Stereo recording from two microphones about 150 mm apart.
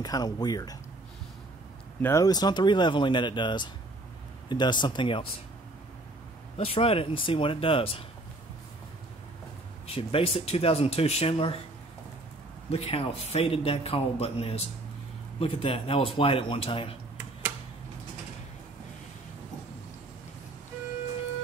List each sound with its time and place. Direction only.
0.0 s speech: 25° left (ahead or behind)
2.0 s speech: 15° left (ahead or behind)
2.2 s a man's voice: 25° left (ahead or behind)
6.5 s a man's voice: 40° left (ahead or behind)
9.8 s a man's voice: 40° left (ahead or behind)
12.7 s a man's voice: 40° left (ahead or behind)